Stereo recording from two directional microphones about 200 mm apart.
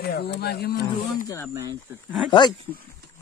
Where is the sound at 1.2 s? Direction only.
15° left (ahead or behind).